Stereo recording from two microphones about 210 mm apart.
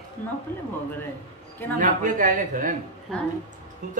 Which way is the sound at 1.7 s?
40° right (ahead or behind).